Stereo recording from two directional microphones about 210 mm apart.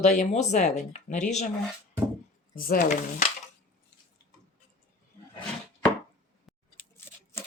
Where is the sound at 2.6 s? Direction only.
40° left (ahead or behind).